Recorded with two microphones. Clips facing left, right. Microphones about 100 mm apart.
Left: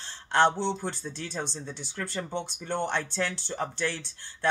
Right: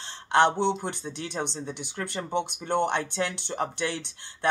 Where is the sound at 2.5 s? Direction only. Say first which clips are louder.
Right 5 dB; 65° right (ahead or behind).